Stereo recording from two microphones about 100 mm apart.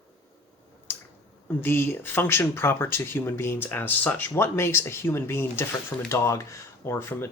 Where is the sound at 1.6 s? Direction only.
20° left (ahead or behind).